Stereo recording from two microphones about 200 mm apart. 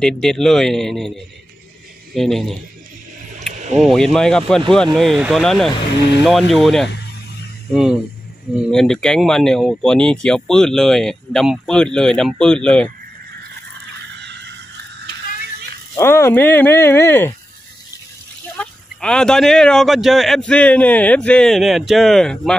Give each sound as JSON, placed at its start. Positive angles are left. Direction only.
{"t": 0.0, "sound": "speech", "side_deg": 5}
{"t": 3.7, "sound": "speech", "side_deg": 0}
{"t": 14.0, "sound": "neigh", "side_deg": -60}
{"t": 16.0, "sound": "speech", "side_deg": 10}
{"t": 18.6, "sound": "speech", "side_deg": 5}